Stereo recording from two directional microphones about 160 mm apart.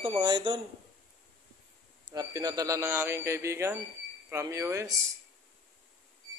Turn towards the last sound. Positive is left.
turn(degrees=-20)  # may be behind; listen again after turning